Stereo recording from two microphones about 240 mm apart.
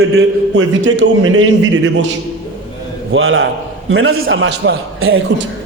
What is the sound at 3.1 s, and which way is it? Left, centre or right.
A man's voice, right.